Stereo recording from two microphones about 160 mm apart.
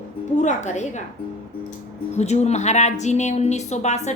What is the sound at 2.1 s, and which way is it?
Speech, 45° left (ahead or behind).